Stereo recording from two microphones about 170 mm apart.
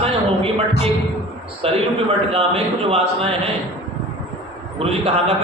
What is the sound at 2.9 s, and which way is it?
Speech, 35° right (ahead or behind).